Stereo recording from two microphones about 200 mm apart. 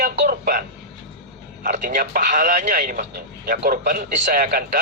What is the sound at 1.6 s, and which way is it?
A man's voice, 40° right (ahead or behind).